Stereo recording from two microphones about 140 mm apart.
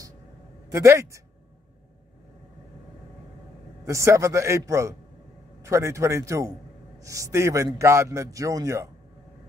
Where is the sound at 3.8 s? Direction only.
20° right (ahead or behind).